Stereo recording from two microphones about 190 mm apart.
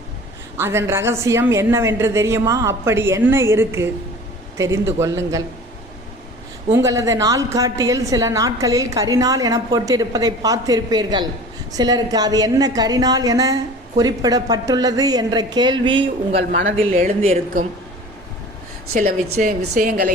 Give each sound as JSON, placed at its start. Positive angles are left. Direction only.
{"t": 0.5, "sound": "a woman's voice", "side_deg": -10}
{"t": 6.7, "sound": "a woman's voice", "side_deg": -15}
{"t": 16.8, "sound": "speech", "side_deg": -35}
{"t": 18.9, "sound": "a woman's voice", "side_deg": -45}